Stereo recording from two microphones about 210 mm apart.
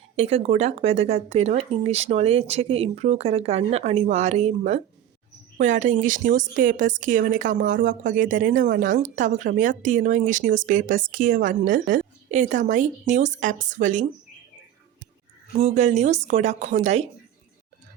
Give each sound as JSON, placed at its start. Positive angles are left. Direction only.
{"t": 0.2, "sound": "a woman's voice", "side_deg": -30}
{"t": 15.5, "sound": "a woman's voice", "side_deg": -30}